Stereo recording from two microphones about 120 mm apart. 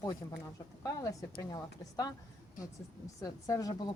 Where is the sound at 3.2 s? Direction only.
25° left (ahead or behind).